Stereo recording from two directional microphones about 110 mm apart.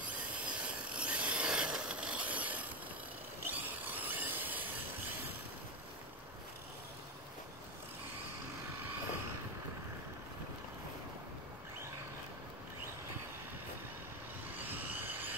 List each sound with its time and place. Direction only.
0.0 s rub: 15° right (ahead or behind)
14.6 s vehicle: 15° right (ahead or behind)